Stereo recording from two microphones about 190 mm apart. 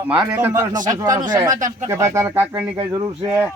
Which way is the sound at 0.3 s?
15° right (ahead or behind).